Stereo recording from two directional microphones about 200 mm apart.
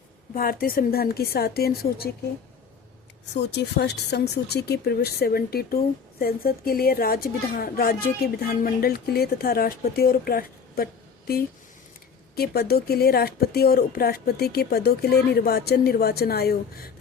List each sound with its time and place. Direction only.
0.3 s a woman's voice: 45° left (ahead or behind)
3.4 s a woman's voice: 55° left (ahead or behind)
12.4 s a woman's voice: 50° left (ahead or behind)